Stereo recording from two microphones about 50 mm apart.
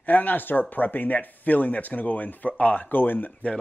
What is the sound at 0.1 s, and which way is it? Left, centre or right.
Speech, left.